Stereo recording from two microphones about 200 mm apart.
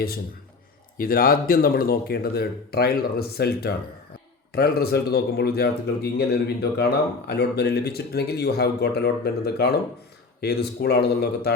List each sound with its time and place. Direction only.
0.9 s speech: 45° left (ahead or behind)